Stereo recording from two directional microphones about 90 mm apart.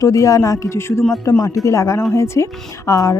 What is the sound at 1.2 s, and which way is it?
Speech, 40° left (ahead or behind).